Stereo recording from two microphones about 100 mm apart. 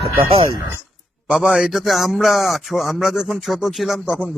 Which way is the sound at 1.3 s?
Centre (ahead or behind).